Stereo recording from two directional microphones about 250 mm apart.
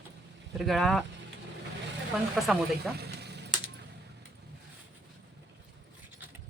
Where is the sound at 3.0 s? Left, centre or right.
Right.